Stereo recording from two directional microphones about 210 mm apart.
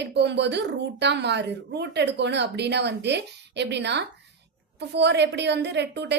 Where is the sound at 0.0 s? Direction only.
55° right (ahead or behind).